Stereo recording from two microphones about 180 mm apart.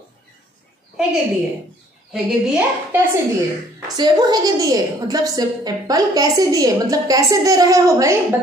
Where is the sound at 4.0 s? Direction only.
20° right (ahead or behind).